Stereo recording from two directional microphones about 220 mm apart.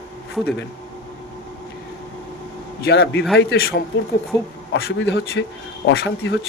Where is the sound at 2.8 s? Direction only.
45° left (ahead or behind).